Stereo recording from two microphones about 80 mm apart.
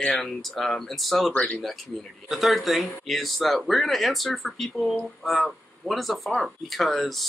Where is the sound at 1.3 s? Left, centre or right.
Centre.